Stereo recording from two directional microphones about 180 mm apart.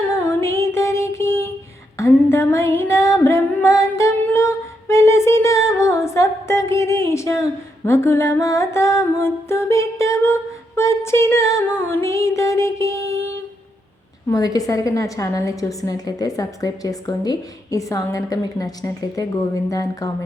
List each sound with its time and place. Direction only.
0.3 s music: 15° left (ahead or behind)
2.0 s female singing: 15° left (ahead or behind)
10.8 s music: 15° left (ahead or behind)
14.3 s a woman's voice: 20° left (ahead or behind)